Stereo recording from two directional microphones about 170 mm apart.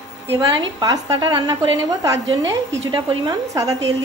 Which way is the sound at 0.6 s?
20° right (ahead or behind).